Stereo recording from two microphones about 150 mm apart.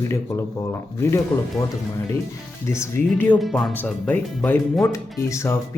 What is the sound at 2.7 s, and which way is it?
A man's voice, 20° left (ahead or behind).